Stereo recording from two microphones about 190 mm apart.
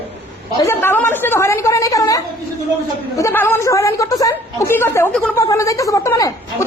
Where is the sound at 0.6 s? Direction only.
10° left (ahead or behind).